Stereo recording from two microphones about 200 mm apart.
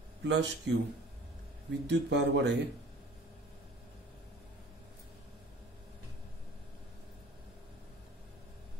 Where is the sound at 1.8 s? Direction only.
60° right (ahead or behind).